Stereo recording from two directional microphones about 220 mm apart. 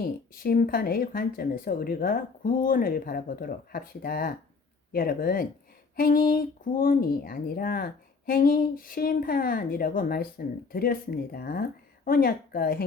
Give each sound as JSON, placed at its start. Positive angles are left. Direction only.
{"t": 0.0, "sound": "speech", "side_deg": 40}